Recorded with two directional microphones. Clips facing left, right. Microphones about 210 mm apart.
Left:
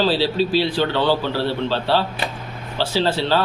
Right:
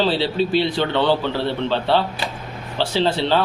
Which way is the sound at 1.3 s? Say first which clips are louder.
Even; 20° right (ahead or behind).